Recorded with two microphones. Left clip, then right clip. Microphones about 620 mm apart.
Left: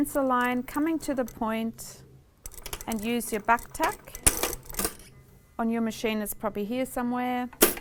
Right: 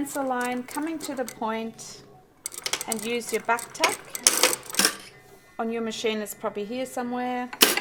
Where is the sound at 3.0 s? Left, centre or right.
Left.